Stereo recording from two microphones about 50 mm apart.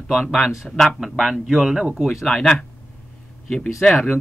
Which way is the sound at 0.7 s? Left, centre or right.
Centre.